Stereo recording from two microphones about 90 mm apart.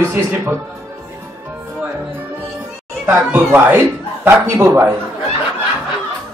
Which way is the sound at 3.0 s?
25° right (ahead or behind).